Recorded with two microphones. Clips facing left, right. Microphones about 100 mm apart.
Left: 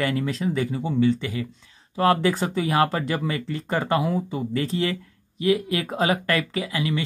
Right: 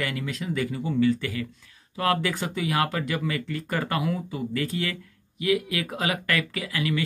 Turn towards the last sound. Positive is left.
turn(degrees=25)  # may be behind; listen again after turning